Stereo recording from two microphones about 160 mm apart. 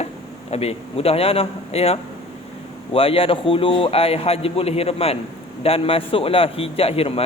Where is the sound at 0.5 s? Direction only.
40° left (ahead or behind).